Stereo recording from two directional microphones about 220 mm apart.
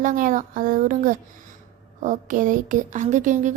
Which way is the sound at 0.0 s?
35° right (ahead or behind).